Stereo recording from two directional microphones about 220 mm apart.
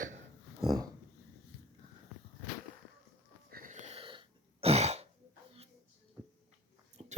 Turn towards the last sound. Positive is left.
turn(degrees=-30)  # may be behind; listen again after turning